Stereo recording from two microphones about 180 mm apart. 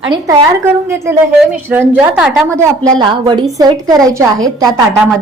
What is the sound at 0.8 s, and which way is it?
A woman's voice, 15° right (ahead or behind).